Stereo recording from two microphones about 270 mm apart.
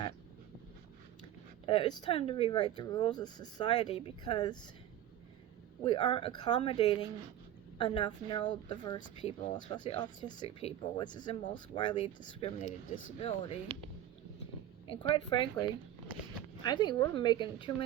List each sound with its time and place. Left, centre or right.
1.6 s speech: centre
5.8 s speech: centre
9.0 s speech: left
9.7 s speech: centre
14.8 s speech: centre